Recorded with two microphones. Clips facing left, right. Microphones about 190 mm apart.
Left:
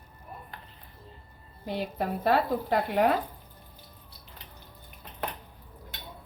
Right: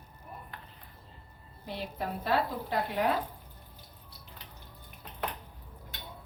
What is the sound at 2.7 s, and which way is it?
Speech, 55° left (ahead or behind).